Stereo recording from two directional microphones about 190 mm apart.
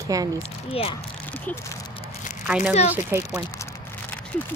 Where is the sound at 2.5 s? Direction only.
10° right (ahead or behind).